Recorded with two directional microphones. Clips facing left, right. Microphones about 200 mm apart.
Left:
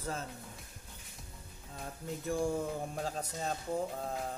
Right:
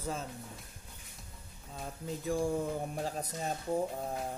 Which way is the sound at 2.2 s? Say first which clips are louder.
Right 1 dB; centre (ahead or behind).